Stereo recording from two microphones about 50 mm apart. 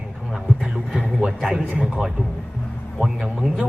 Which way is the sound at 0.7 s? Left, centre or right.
Centre.